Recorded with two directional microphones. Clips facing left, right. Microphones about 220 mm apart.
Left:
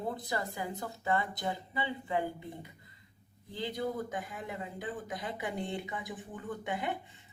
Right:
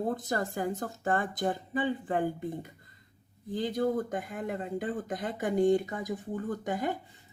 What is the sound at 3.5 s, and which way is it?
Speech, 50° right (ahead or behind).